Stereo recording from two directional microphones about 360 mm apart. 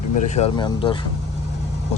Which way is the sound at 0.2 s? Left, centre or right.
Centre.